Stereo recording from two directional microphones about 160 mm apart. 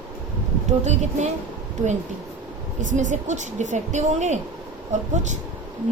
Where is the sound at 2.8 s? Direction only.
50° right (ahead or behind).